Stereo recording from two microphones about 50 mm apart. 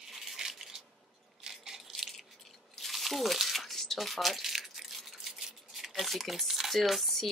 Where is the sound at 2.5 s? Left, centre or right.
Centre.